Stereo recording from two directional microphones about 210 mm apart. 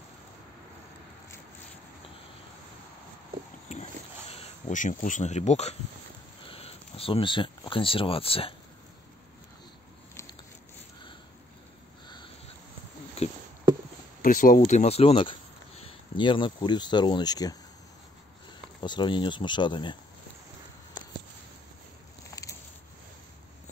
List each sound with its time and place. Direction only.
4.3 s speech: 30° left (ahead or behind)
13.2 s a sound: 30° left (ahead or behind)
14.2 s speech: 40° left (ahead or behind); by 17.6 s 20° left (ahead or behind)
18.8 s speech: 20° left (ahead or behind)